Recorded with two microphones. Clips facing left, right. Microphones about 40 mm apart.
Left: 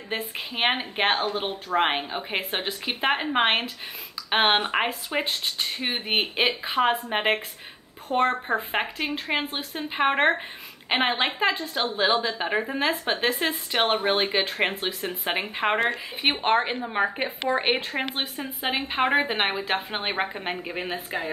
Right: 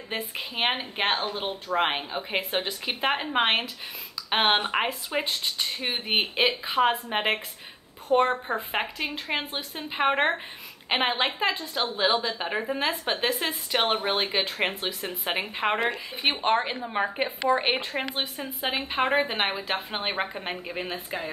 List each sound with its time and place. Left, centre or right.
0.1 s a woman's voice: centre